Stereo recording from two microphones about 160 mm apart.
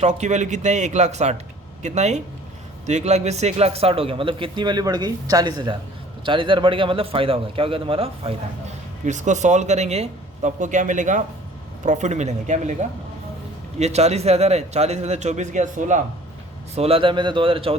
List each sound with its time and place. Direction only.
0.0 s a man's voice: 45° right (ahead or behind)
9.0 s a man's voice: 50° right (ahead or behind)
13.7 s a man's voice: 45° right (ahead or behind)
16.7 s speech: 40° right (ahead or behind)